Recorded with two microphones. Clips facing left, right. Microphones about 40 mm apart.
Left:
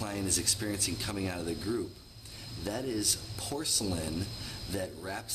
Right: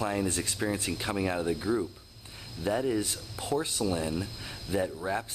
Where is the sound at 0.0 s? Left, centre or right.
Right.